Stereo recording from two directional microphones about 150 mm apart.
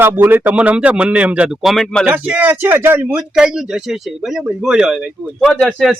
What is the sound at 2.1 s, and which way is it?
Speech, 10° right (ahead or behind).